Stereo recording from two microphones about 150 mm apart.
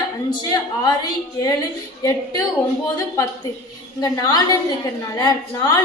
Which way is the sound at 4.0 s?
25° left (ahead or behind).